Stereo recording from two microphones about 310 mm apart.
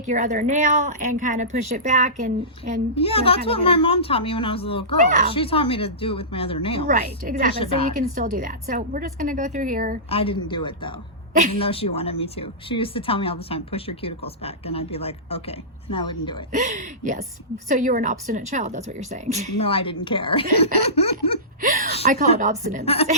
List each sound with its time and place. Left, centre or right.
0.1 s speech: right
2.9 s speech: centre
6.8 s speech: right
10.1 s speech: centre
16.5 s speech: right
19.5 s speech: centre
20.9 s laughter: centre
21.6 s a sound: right
22.0 s speech: right